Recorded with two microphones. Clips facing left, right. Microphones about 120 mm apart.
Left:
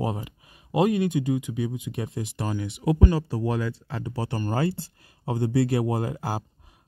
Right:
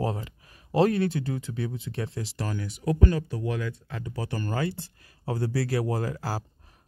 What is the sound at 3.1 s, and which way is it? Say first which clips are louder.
Speech: left 4 dB; 35° left (ahead or behind).